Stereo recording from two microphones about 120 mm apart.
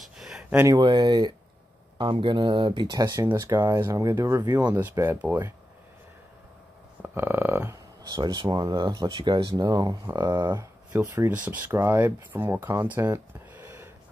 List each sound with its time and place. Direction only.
0.0 s a sound: centre (ahead or behind)
0.7 s speech: 35° right (ahead or behind)
4.4 s speech: 35° right (ahead or behind)
4.7 s speech: 15° right (ahead or behind)
7.0 s a sound: 20° right (ahead or behind)
8.1 s speech: 35° right (ahead or behind)
9.1 s speech: 45° right (ahead or behind)
10.5 s speech: 25° right (ahead or behind)
11.3 s speech: 15° right (ahead or behind)
12.8 s a sound: 15° right (ahead or behind)